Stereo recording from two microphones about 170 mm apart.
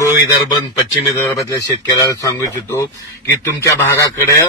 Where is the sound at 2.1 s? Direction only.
20° left (ahead or behind).